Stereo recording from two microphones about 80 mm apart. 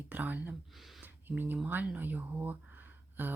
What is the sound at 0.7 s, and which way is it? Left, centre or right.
Speech, centre.